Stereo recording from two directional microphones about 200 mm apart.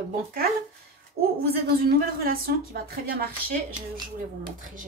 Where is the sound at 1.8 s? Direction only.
50° right (ahead or behind).